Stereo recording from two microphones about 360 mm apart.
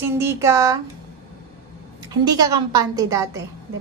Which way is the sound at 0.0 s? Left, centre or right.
Centre.